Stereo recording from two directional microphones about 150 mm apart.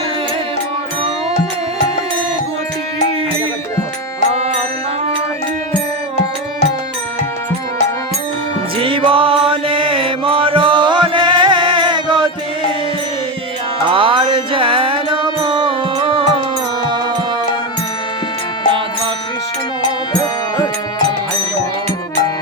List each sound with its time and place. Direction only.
8.8 s mantra: 35° right (ahead or behind)
13.8 s music: 35° right (ahead or behind)